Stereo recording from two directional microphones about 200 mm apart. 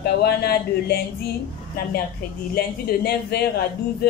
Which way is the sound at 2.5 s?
50° left (ahead or behind).